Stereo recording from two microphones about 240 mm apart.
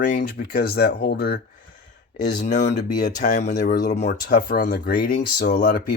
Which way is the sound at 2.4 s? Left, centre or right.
Left.